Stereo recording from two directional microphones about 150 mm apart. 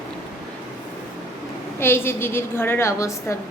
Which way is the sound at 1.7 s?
15° left (ahead or behind).